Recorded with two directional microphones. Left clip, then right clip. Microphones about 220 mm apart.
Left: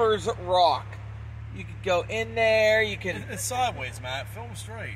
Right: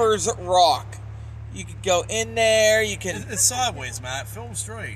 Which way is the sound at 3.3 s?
10° right (ahead or behind).